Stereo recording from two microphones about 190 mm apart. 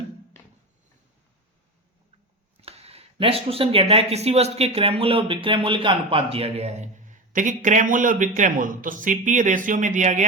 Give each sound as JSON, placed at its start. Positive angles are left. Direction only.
{"t": 2.6, "sound": "speech", "side_deg": -30}